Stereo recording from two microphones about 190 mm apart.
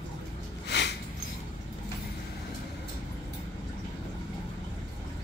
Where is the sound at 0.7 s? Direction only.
60° left (ahead or behind).